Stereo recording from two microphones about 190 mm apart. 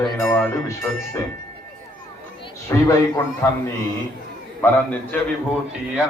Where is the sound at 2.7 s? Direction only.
15° left (ahead or behind).